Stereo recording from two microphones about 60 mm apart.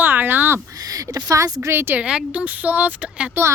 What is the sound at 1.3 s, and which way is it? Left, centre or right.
Speech, right.